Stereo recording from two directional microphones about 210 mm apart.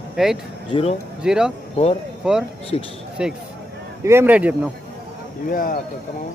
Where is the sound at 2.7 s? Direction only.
30° left (ahead or behind).